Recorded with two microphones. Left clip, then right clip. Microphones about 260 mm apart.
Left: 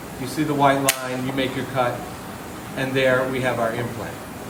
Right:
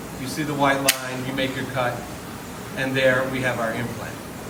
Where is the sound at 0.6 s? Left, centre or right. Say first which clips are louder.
Left 1 dB; left.